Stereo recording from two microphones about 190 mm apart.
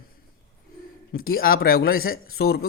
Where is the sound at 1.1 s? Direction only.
50° left (ahead or behind).